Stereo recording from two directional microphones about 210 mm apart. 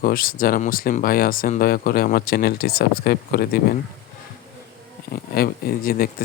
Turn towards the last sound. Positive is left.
turn(degrees=45)  # may be behind; listen again after turning